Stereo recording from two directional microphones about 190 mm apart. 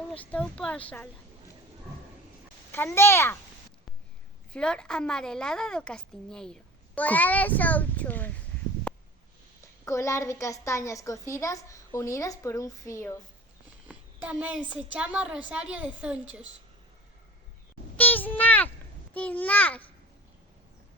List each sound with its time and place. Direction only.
0.1 s a woman's voice: 5° left (ahead or behind)
2.7 s a woman's voice: 10° left (ahead or behind)
4.5 s a woman's voice: 5° left (ahead or behind)
8.9 s stomach rumble: 5° left (ahead or behind)
9.8 s a woman's voice: 15° left (ahead or behind)
13.8 s a sound: 5° right (ahead or behind)
14.7 s a woman's voice: 5° right (ahead or behind)
17.9 s a child's voice: 10° left (ahead or behind)